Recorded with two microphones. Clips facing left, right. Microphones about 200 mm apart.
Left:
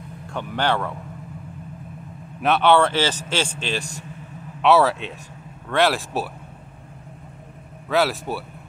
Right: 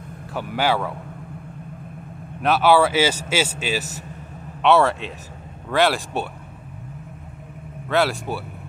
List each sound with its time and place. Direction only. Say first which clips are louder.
0.3 s speech: right 1 dB; 5° right (ahead or behind)
2.4 s speech: right 1 dB; 5° right (ahead or behind)
7.9 s speech: even; centre (ahead or behind)